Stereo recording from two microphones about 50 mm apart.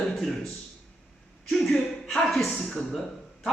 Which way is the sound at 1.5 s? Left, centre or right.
Centre.